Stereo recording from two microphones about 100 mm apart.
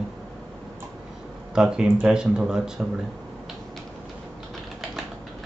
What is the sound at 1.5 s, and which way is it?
Speech, 5° right (ahead or behind).